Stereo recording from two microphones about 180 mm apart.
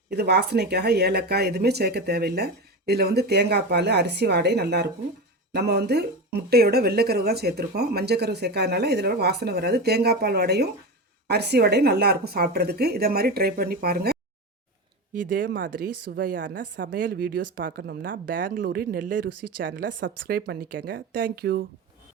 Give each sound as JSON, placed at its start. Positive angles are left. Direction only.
{"t": 0.1, "sound": "speech", "side_deg": -65}
{"t": 15.1, "sound": "speech", "side_deg": -50}
{"t": 15.4, "sound": "speech", "side_deg": -80}
{"t": 16.4, "sound": "a woman's voice", "side_deg": -85}
{"t": 17.0, "sound": "speech", "side_deg": -55}
{"t": 19.6, "sound": "a woman's voice", "side_deg": -90}
{"t": 20.3, "sound": "speech", "side_deg": -55}
{"t": 21.2, "sound": "speech", "side_deg": -60}